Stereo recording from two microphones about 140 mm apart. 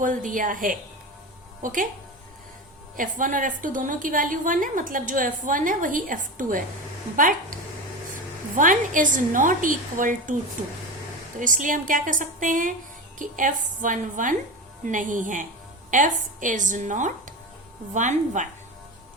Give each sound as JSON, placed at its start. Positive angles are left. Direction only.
{"t": 0.0, "sound": "a woman's voice", "side_deg": -70}
{"t": 2.9, "sound": "a woman's voice", "side_deg": -70}
{"t": 11.3, "sound": "a woman's voice", "side_deg": -70}